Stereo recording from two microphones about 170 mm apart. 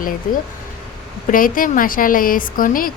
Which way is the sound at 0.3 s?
50° left (ahead or behind).